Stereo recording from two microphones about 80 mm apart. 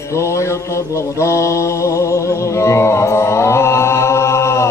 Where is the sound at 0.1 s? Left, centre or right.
Left.